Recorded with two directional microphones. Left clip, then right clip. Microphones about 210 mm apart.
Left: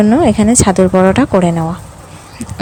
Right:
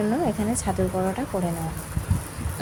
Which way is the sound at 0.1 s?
45° left (ahead or behind).